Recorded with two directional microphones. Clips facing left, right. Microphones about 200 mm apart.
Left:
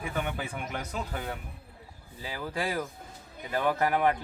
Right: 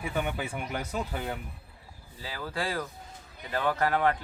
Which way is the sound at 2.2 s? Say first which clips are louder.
Left 1 dB; 15° left (ahead or behind).